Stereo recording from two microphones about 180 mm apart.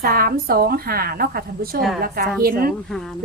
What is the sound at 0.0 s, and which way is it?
A woman's voice, 55° right (ahead or behind).